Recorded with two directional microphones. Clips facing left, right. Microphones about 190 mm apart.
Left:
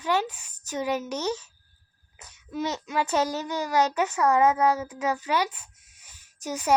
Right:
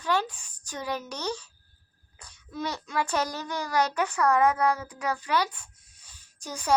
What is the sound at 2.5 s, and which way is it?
A child's voice, 20° left (ahead or behind).